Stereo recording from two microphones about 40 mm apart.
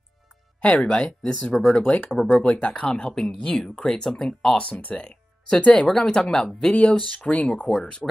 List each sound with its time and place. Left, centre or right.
0.7 s speech: left
1.5 s speech: centre
1.8 s speech: left
2.1 s speech: centre
2.4 s speech: left
2.8 s speech: centre
4.6 s speech: left
5.9 s speech: centre
6.7 s speech: left
8.0 s speech: centre